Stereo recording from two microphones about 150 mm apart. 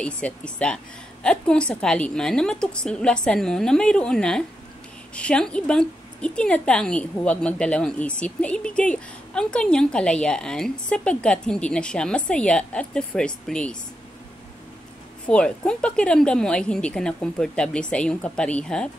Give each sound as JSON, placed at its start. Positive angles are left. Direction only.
{"t": 0.0, "sound": "a woman's voice", "side_deg": 5}
{"t": 15.2, "sound": "a woman's voice", "side_deg": 5}